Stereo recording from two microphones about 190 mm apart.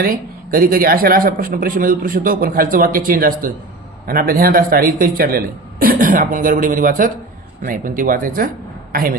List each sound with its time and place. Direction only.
0.5 s speech: 50° right (ahead or behind)